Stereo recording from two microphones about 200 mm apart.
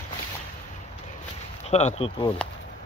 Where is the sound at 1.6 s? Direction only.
35° left (ahead or behind).